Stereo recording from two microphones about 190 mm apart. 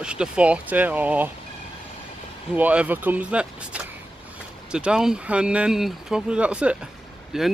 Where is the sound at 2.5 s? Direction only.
5° right (ahead or behind).